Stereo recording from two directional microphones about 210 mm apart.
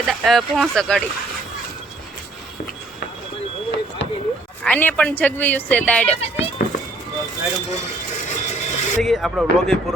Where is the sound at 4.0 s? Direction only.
55° left (ahead or behind).